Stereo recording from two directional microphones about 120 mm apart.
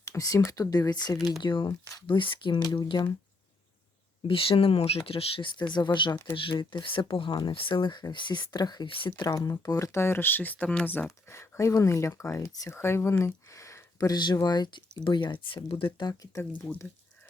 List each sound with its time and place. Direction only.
0.0 s speech: 25° left (ahead or behind)
4.3 s speech: 50° left (ahead or behind)
16.0 s speech: 30° left (ahead or behind)
16.6 s speech: 15° left (ahead or behind)